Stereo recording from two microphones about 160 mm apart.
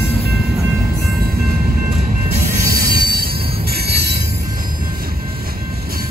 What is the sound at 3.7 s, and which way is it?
Jingle bell, 85° right.